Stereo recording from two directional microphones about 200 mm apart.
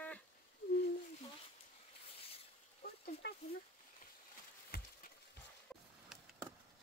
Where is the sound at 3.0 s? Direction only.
55° left (ahead or behind).